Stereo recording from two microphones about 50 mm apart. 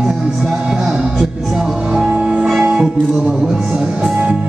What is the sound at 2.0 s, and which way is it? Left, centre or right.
Music, centre.